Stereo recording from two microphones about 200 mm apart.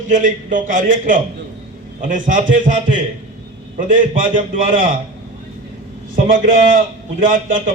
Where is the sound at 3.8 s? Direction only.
40° right (ahead or behind).